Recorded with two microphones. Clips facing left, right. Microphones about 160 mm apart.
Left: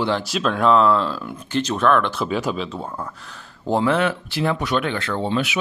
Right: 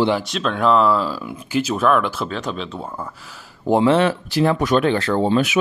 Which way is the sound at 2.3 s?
5° left (ahead or behind).